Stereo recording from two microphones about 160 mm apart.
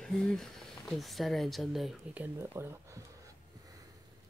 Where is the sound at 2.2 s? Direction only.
15° right (ahead or behind).